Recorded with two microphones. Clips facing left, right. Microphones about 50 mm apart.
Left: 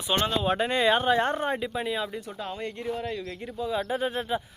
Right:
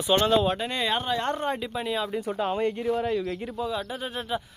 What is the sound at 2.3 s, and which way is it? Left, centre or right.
Speech, right.